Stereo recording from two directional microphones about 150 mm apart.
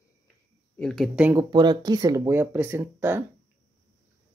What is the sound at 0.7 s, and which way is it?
Speech, 5° left (ahead or behind).